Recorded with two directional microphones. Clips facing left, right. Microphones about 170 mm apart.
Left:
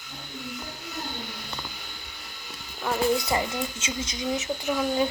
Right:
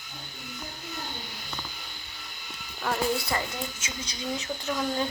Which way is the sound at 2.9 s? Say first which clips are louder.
Left 3 dB; 20° left (ahead or behind).